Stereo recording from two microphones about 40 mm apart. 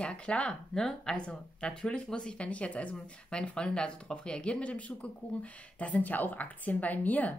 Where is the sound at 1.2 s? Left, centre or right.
Left.